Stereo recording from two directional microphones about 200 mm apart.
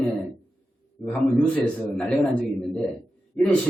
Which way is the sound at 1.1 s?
5° left (ahead or behind).